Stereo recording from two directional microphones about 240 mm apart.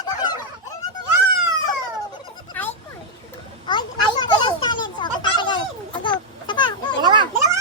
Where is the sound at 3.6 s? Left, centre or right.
Centre.